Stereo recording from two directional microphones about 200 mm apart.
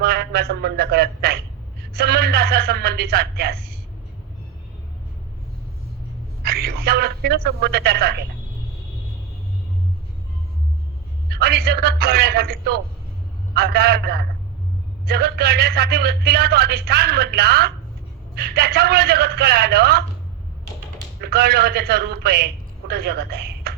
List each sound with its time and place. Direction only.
0.0 s a man's voice: 50° right (ahead or behind)
6.4 s speech: 50° right (ahead or behind)
11.3 s a man's voice: 50° right (ahead or behind)
21.2 s a man's voice: 50° right (ahead or behind)